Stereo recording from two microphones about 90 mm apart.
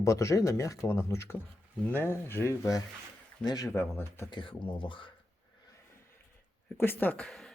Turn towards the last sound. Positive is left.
turn(degrees=5)  # may be behind; listen again after turning